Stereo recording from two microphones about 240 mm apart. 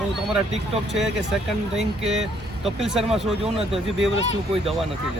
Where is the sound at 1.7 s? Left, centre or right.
Centre.